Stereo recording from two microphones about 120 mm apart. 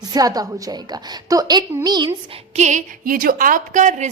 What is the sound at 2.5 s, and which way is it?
Female singing, 80° right.